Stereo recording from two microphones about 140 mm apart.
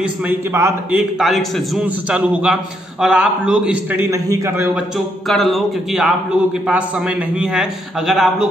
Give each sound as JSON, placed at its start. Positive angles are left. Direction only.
{"t": 0.0, "sound": "a man's voice", "side_deg": -15}
{"t": 1.2, "sound": "a man's voice", "side_deg": -5}
{"t": 4.1, "sound": "a man's voice", "side_deg": -25}
{"t": 4.9, "sound": "a man's voice", "side_deg": 0}